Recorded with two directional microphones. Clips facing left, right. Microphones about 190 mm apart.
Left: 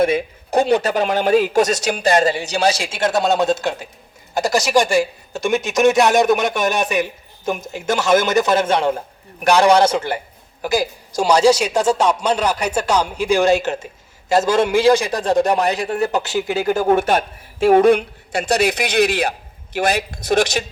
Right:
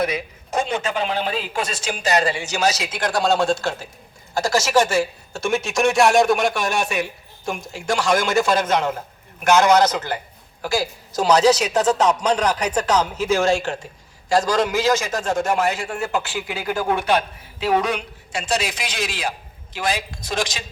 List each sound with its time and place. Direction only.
0.0 s speech: 30° left (ahead or behind)
2.0 s a man's voice: 50° left (ahead or behind); by 6.1 s 20° left (ahead or behind)
6.1 s speech: centre (ahead or behind)
6.4 s a man's voice: 20° left (ahead or behind)
10.6 s a man's voice: 15° left (ahead or behind); by 20.7 s 70° left (ahead or behind)